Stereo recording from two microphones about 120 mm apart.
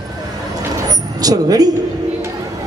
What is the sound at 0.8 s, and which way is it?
Vehicle, 30° right (ahead or behind).